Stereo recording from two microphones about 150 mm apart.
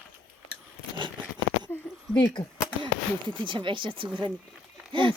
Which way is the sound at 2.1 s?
15° left (ahead or behind).